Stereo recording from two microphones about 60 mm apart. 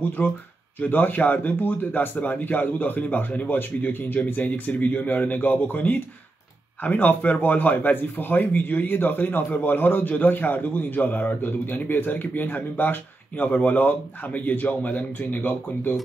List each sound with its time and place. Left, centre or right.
0.2 s speech: left